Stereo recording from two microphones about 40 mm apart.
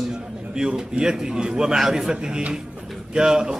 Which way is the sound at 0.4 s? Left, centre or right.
Right.